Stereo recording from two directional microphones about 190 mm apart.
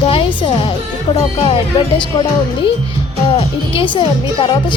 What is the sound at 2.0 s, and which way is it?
A woman's voice, 25° left (ahead or behind).